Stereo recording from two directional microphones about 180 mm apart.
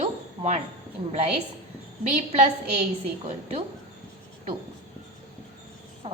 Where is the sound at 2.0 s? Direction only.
40° right (ahead or behind).